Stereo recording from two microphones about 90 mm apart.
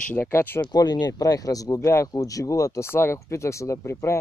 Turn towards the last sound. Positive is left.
turn(degrees=30)  # may be behind; listen again after turning